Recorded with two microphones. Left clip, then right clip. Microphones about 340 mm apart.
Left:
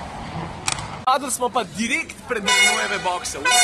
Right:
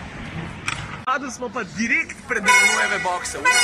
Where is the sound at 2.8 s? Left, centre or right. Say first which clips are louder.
Right 1 dB; centre.